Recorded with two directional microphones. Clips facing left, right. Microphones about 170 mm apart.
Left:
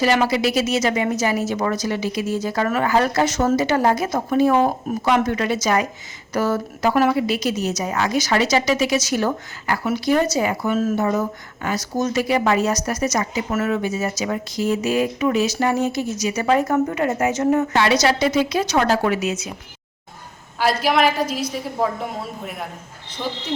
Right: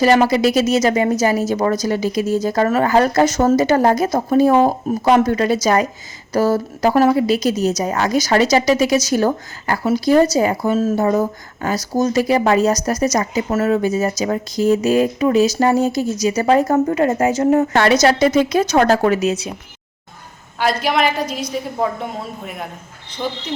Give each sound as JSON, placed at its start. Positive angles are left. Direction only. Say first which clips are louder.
{"t": 0.0, "sound": "a woman's voice", "louder": "right 5 dB", "side_deg": -45}
{"t": 17.7, "sound": "a woman's voice", "louder": "right 4 dB", "side_deg": -50}
{"t": 20.6, "sound": "a woman's voice", "louder": "right 1 dB", "side_deg": 0}